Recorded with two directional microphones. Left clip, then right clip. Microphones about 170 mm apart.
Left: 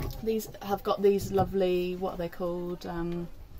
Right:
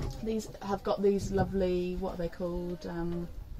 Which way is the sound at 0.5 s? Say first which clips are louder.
Left 2 dB; 10° right (ahead or behind).